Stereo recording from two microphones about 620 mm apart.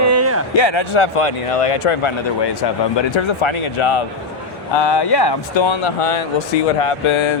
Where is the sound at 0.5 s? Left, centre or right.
Left.